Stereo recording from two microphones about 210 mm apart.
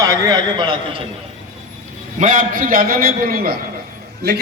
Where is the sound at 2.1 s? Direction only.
40° right (ahead or behind).